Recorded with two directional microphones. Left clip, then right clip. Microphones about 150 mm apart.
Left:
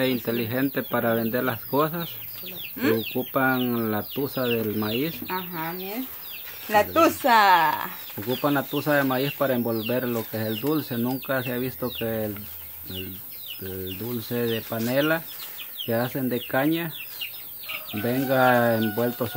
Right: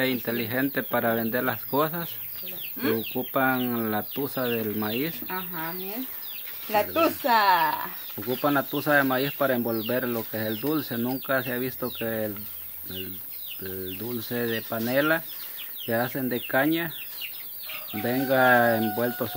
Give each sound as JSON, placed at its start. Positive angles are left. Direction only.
{"t": 0.0, "sound": "speech", "side_deg": -5}
{"t": 3.3, "sound": "speech", "side_deg": -5}
{"t": 5.3, "sound": "speech", "side_deg": 25}
{"t": 8.2, "sound": "speech", "side_deg": 0}
{"t": 9.6, "sound": "speech", "side_deg": -20}
{"t": 9.8, "sound": "speech", "side_deg": -5}
{"t": 13.6, "sound": "speech", "side_deg": 0}
{"t": 18.0, "sound": "speech", "side_deg": 0}